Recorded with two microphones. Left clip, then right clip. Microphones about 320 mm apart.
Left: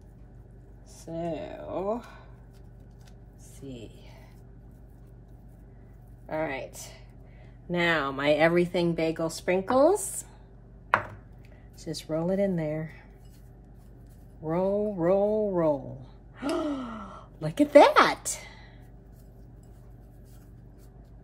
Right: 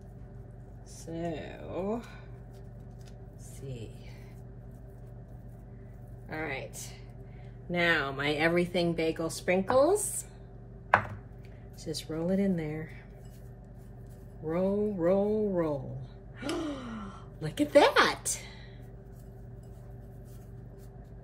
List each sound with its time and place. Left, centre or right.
1.1 s speech: centre
6.2 s a woman's voice: centre
11.8 s speech: centre
14.5 s speech: centre